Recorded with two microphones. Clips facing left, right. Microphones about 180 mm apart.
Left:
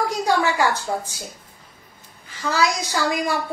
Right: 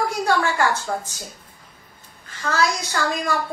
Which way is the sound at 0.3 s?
15° left (ahead or behind).